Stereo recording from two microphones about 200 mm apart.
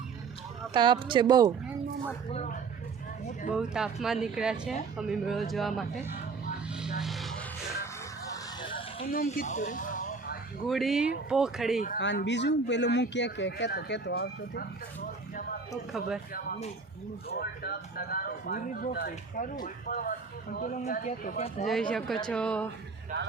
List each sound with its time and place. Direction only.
0.7 s speech: 25° right (ahead or behind)
2.3 s speech: 35° left (ahead or behind)
3.5 s a woman's voice: 5° right (ahead or behind)
7.0 s music: centre (ahead or behind)
9.0 s speech: 45° left (ahead or behind)
10.7 s a woman's voice: centre (ahead or behind)
11.9 s speech: 60° left (ahead or behind)
15.9 s a woman's voice: 5° right (ahead or behind)
17.2 s speech: 50° left (ahead or behind); by 21.5 s 35° left (ahead or behind)
21.6 s a woman's voice: centre (ahead or behind)